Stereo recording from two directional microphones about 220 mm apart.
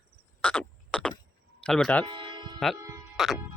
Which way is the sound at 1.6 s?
5° left (ahead or behind).